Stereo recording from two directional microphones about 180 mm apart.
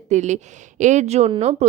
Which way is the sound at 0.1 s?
40° right (ahead or behind).